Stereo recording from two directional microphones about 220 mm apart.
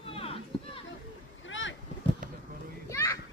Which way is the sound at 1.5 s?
60° left (ahead or behind).